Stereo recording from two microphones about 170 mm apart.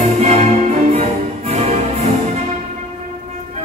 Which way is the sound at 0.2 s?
40° right (ahead or behind).